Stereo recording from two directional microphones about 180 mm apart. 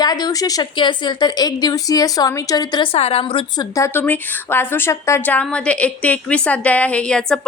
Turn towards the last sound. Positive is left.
turn(degrees=5)  # may be behind; listen again after turning